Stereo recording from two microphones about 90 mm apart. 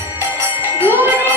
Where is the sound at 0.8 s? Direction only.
25° right (ahead or behind).